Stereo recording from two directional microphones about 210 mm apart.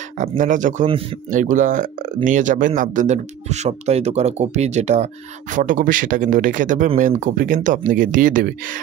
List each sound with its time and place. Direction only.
0.4 s speech: 40° right (ahead or behind)